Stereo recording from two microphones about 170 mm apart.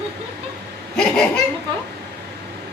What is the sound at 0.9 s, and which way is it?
Laughter, 5° left (ahead or behind).